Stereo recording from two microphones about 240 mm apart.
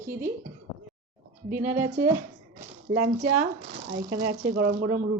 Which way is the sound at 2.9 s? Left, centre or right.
Right.